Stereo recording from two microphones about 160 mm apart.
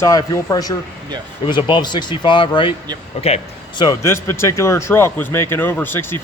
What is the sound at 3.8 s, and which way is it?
Speech, 20° left (ahead or behind).